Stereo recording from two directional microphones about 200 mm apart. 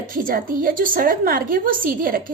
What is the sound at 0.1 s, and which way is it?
A woman's voice, 45° right (ahead or behind).